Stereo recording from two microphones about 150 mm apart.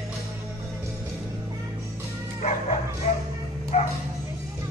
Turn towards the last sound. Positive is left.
turn(degrees=45)  # may be behind; listen again after turning